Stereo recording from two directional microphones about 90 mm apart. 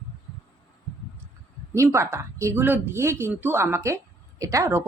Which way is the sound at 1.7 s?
30° right (ahead or behind).